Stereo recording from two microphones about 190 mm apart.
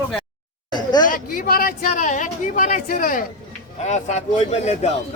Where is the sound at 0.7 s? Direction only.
20° left (ahead or behind).